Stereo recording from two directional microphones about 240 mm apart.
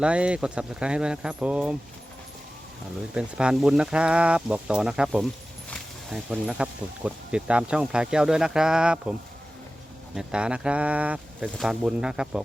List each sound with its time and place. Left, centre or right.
0.0 s speech: centre
3.2 s speech: centre
10.2 s speech: centre